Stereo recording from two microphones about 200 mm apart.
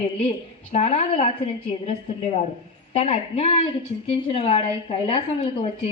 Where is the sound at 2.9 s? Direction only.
30° left (ahead or behind).